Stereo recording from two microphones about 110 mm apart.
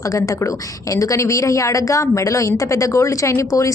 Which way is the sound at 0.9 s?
30° left (ahead or behind).